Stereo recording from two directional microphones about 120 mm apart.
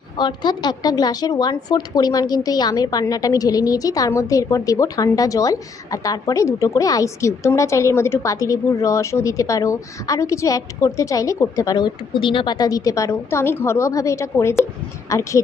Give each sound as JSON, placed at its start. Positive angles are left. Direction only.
{"t": 0.2, "sound": "a woman's voice", "side_deg": 40}